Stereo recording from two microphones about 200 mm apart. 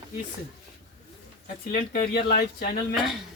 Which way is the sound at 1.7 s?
50° left (ahead or behind).